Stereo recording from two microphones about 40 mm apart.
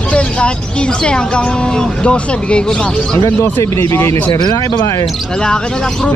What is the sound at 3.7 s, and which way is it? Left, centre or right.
Speech, left.